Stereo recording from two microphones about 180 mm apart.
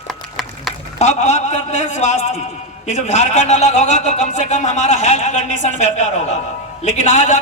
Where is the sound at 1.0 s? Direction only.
40° left (ahead or behind).